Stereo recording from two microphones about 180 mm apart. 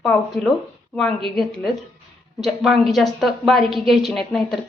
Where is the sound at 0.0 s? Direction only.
5° left (ahead or behind).